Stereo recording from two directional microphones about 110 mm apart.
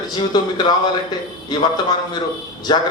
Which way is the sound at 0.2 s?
40° left (ahead or behind).